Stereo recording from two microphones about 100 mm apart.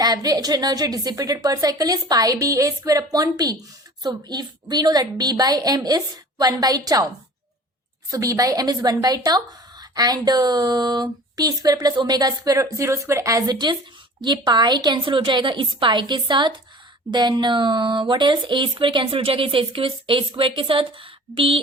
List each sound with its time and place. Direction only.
0.0 s speech: 40° right (ahead or behind)
8.1 s a woman's voice: 35° right (ahead or behind); by 21.6 s 65° right (ahead or behind)